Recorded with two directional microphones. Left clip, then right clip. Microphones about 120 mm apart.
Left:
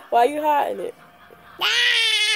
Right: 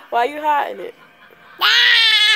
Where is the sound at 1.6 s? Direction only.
25° left (ahead or behind).